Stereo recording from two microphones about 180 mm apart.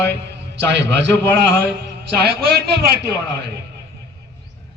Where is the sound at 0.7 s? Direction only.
70° right (ahead or behind).